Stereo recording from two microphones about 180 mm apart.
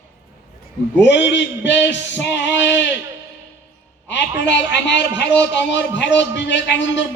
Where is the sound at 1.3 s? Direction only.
80° left.